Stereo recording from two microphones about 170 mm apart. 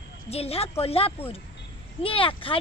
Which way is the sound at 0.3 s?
35° left (ahead or behind).